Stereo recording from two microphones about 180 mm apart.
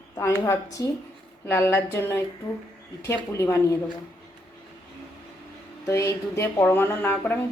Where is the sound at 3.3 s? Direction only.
15° left (ahead or behind).